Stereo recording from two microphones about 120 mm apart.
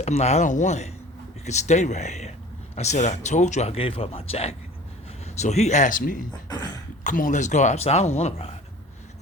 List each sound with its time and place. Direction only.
0.0 s speech: 65° left (ahead or behind)
5.4 s speech: 70° left (ahead or behind); by 6.2 s 90° left
6.5 s a sound: 35° left (ahead or behind)
7.0 s speech: 90° left; by 8.5 s 60° left (ahead or behind)